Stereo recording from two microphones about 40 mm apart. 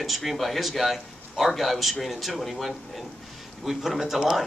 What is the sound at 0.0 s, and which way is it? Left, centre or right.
A man's voice, centre.